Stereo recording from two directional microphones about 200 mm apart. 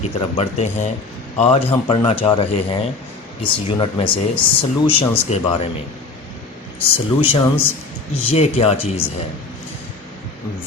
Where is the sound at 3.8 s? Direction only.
25° left (ahead or behind).